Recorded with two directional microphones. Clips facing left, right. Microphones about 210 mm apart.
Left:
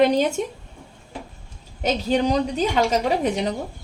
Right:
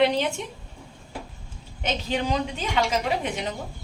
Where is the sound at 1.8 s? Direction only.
40° left (ahead or behind).